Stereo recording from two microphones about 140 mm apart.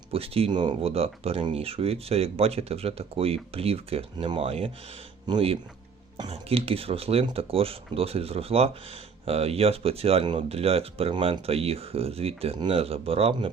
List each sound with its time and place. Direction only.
0.1 s speech: 45° right (ahead or behind)